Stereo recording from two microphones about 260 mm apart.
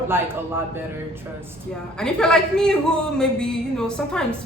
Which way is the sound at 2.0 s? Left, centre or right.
Centre.